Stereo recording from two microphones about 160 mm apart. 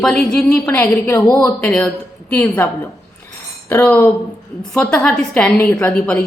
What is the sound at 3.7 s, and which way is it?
A woman's voice, 10° left (ahead or behind).